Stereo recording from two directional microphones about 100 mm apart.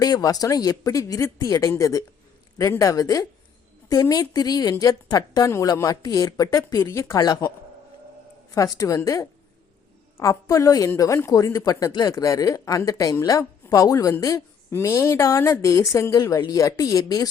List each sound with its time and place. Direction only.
0.0 s a woman's voice: 40° left (ahead or behind)
8.5 s a woman's voice: 35° left (ahead or behind)
10.2 s a woman's voice: 30° left (ahead or behind)